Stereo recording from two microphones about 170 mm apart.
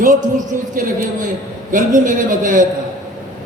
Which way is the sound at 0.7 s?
55° right (ahead or behind).